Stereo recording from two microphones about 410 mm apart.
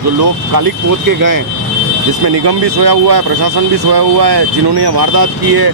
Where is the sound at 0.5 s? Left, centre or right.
Right.